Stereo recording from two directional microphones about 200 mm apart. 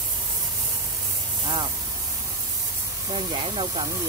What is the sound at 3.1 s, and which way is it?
Speech, 25° right (ahead or behind).